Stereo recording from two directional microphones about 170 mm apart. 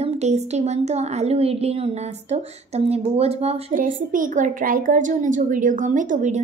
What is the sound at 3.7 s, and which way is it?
A woman's voice, 50° right (ahead or behind).